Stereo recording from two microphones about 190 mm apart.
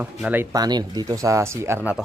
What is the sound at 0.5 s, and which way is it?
Speech, 20° right (ahead or behind).